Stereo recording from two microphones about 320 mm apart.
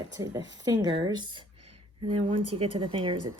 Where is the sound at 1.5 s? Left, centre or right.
Right.